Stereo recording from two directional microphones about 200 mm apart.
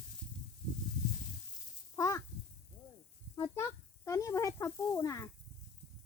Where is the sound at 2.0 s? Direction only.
15° left (ahead or behind).